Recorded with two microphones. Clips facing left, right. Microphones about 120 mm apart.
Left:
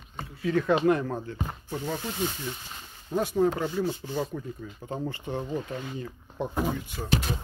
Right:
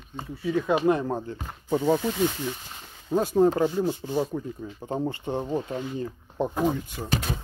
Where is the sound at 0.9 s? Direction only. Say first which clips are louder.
Right 1 dB; 25° right (ahead or behind).